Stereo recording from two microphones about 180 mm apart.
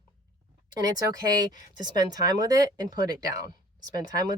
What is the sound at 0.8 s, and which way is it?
Speech, 20° right (ahead or behind).